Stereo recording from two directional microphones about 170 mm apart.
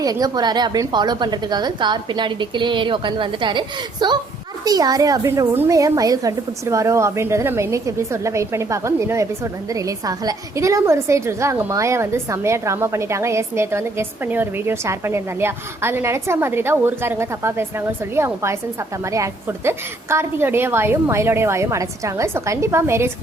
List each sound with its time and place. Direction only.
0.0 s a woman's voice: 20° right (ahead or behind)